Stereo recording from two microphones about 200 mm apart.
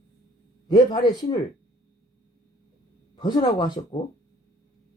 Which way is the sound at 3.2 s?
25° left (ahead or behind).